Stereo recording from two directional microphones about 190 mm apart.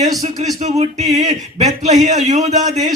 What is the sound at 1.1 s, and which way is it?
Speech, 35° right (ahead or behind).